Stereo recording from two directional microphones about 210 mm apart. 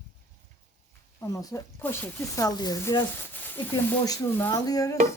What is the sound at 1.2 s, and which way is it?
Speech, 15° left (ahead or behind).